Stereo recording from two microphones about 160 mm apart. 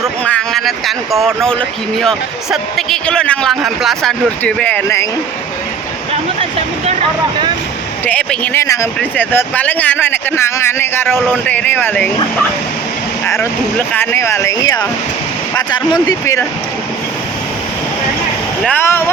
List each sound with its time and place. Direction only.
0.0 s speech: 5° left (ahead or behind)
6.4 s speech: 35° right (ahead or behind)
8.0 s a man's voice: 10° left (ahead or behind)
18.6 s a man's voice: 10° left (ahead or behind)